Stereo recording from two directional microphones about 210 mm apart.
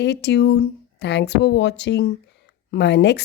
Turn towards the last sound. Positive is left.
turn(degrees=55)  # may be behind; listen again after turning